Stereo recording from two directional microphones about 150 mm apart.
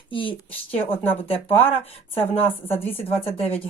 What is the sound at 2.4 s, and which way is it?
Speech, 15° left (ahead or behind).